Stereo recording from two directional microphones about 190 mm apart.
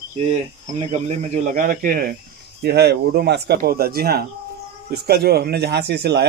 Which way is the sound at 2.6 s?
60° right (ahead or behind).